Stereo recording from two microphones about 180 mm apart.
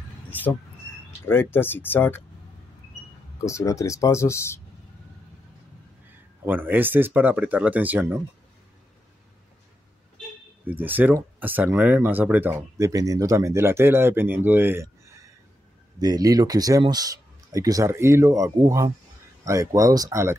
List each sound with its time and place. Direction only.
1.2 s speech: 10° left (ahead or behind)
3.4 s speech: 15° left (ahead or behind)
6.4 s speech: 10° right (ahead or behind)
10.7 s speech: 10° right (ahead or behind)
16.0 s speech: 20° right (ahead or behind)